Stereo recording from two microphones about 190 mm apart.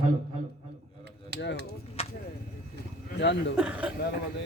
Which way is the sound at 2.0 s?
30° left (ahead or behind).